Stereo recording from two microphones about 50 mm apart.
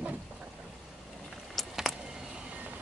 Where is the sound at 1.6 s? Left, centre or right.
Centre.